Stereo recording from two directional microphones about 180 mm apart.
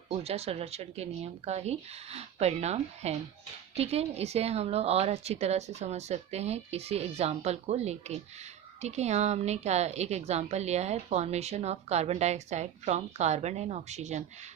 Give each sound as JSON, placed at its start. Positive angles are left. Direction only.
{"t": 0.1, "sound": "a woman's voice", "side_deg": -35}